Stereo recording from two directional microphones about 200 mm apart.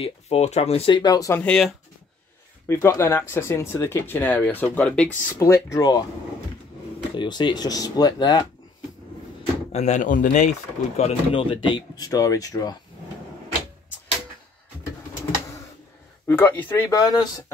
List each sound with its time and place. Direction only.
0.0 s speech: 30° left (ahead or behind)
1.4 s speech: 5° left (ahead or behind)
2.7 s speech: 15° left (ahead or behind)
7.2 s speech: 20° left (ahead or behind)
9.7 s speech: 35° left (ahead or behind)
11.0 s speech: 30° left (ahead or behind)
16.3 s speech: 10° left (ahead or behind)